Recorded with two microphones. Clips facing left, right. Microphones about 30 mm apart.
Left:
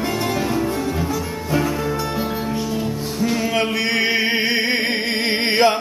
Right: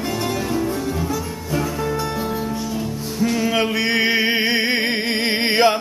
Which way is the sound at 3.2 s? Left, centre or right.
Centre.